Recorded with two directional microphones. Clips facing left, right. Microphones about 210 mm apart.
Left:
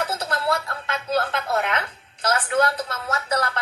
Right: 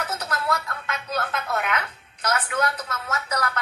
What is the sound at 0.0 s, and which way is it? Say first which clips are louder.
Speech: left 3 dB; 30° left (ahead or behind).